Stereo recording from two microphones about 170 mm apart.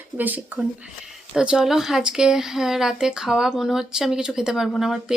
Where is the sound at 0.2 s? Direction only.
10° right (ahead or behind).